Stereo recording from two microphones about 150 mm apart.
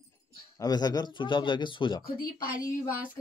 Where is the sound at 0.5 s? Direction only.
25° left (ahead or behind).